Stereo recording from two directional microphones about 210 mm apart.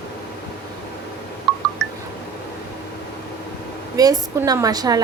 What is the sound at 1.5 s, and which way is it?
Music, centre (ahead or behind).